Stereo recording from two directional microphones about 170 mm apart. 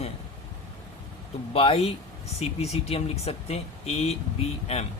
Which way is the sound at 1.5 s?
35° left (ahead or behind).